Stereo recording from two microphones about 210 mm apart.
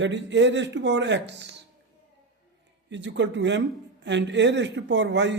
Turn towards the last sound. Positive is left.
turn(degrees=-60)  # may be behind; listen again after turning